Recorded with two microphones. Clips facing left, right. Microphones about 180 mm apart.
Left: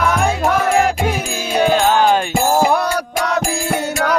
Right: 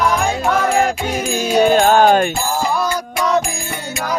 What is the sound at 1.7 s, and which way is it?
Music, 50° right (ahead or behind).